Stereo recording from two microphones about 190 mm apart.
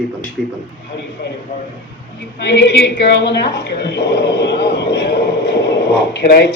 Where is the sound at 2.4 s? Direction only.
65° left (ahead or behind).